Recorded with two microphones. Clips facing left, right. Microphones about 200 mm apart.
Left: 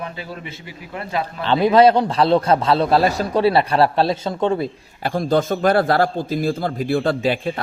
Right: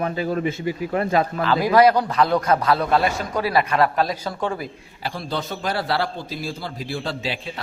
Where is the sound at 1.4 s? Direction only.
25° left (ahead or behind).